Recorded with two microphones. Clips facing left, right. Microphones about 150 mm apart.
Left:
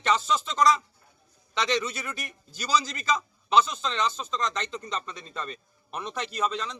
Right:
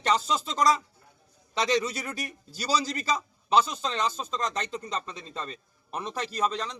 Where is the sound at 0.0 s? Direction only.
40° right (ahead or behind).